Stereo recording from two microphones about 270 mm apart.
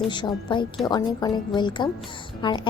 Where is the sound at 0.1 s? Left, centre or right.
Centre.